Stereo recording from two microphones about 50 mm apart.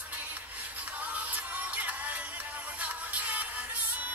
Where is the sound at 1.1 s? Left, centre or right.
Right.